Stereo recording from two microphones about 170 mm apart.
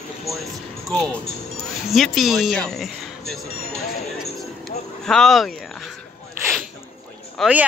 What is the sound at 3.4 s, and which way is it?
Speech, 65° left (ahead or behind).